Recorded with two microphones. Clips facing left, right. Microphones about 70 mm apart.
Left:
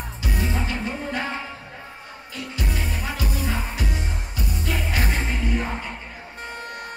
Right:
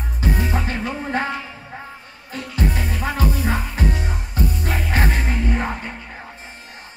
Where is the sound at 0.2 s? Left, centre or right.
Right.